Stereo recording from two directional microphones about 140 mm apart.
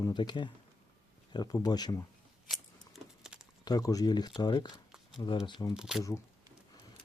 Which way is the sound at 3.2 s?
5° right (ahead or behind).